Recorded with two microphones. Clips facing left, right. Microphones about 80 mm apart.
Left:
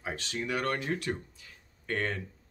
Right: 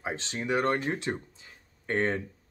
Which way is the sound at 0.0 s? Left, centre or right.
Right.